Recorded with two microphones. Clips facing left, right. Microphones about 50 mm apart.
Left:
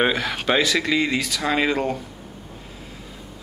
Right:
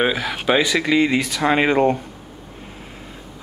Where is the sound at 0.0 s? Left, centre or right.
Centre; by 2.0 s right.